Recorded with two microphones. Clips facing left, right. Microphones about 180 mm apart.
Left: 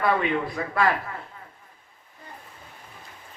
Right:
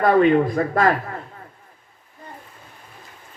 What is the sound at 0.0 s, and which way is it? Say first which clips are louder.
Speech: right 9 dB; 45° right (ahead or behind).